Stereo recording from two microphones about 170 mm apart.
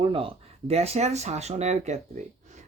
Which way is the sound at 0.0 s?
30° right (ahead or behind).